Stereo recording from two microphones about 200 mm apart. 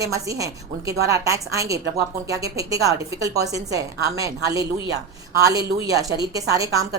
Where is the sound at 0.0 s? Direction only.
15° right (ahead or behind).